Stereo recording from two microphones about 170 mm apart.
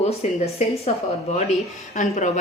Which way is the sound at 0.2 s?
40° left (ahead or behind).